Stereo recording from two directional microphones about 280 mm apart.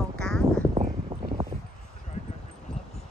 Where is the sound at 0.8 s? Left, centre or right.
Centre.